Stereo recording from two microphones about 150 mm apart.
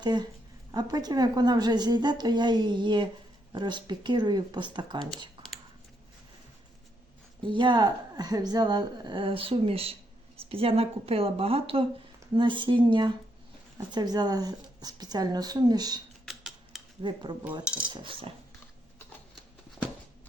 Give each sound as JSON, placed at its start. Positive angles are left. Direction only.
{"t": 0.0, "sound": "a woman's voice", "side_deg": -30}
{"t": 7.4, "sound": "a woman's voice", "side_deg": -30}
{"t": 16.2, "sound": "a sound", "side_deg": 0}
{"t": 17.0, "sound": "a woman's voice", "side_deg": -30}